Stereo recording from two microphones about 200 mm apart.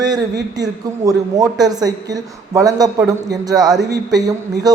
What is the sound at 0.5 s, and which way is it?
Speech, 20° right (ahead or behind).